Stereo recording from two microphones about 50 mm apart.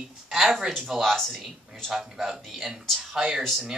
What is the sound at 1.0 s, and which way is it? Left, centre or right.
Speech, centre.